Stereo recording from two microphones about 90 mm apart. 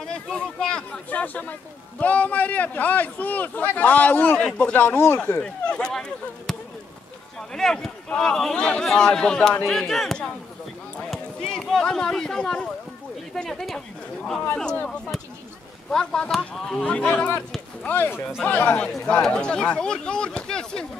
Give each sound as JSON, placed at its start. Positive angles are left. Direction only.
{"t": 0.0, "sound": "speech", "side_deg": 10}
{"t": 4.7, "sound": "speech", "side_deg": 25}
{"t": 5.4, "sound": "speech", "side_deg": 10}
{"t": 15.9, "sound": "speech", "side_deg": 10}